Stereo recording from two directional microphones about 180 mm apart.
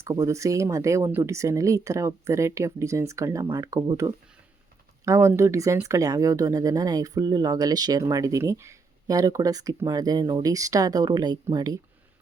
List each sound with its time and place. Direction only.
0.0 s speech: 15° right (ahead or behind)